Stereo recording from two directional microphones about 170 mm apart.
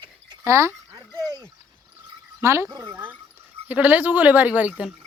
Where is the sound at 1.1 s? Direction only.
20° right (ahead or behind).